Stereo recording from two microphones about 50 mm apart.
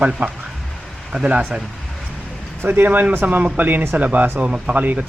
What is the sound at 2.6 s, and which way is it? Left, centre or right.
Speech, right.